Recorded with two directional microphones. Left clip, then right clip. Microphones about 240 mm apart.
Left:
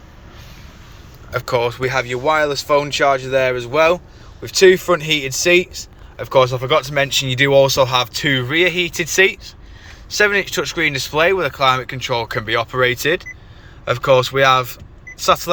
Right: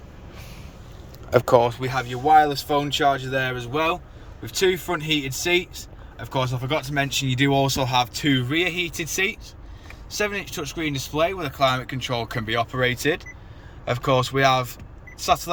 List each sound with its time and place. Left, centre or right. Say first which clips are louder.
1.3 s speech: right 4 dB; right
1.5 s speech: left 1 dB; centre
1.8 s speech: left 6 dB; centre